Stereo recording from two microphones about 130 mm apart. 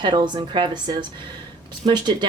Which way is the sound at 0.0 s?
35° right (ahead or behind).